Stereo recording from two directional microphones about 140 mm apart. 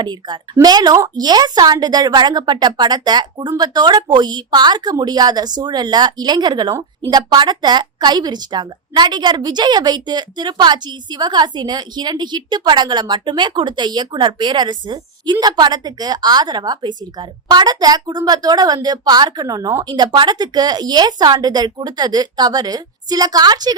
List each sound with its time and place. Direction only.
0.0 s a woman's voice: 35° right (ahead or behind)